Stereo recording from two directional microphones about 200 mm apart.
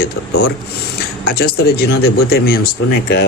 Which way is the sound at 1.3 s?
50° left (ahead or behind).